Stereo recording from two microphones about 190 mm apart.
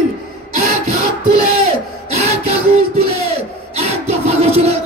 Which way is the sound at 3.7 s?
35° right (ahead or behind).